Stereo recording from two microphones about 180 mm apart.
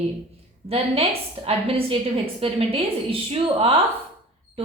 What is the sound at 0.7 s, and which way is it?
A woman's voice, 35° right (ahead or behind).